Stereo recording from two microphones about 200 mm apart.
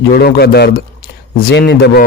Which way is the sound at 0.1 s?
50° left (ahead or behind).